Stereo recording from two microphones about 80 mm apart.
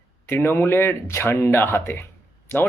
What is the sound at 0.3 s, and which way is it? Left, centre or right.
Speech, left.